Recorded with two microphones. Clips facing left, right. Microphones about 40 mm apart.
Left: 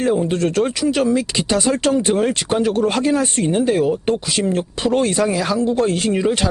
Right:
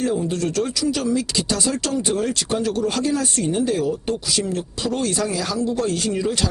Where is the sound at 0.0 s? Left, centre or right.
Left.